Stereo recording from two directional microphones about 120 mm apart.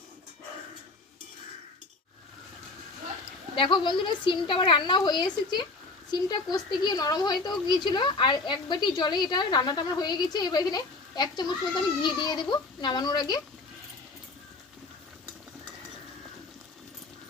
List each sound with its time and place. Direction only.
3.5 s a woman's voice: 45° left (ahead or behind)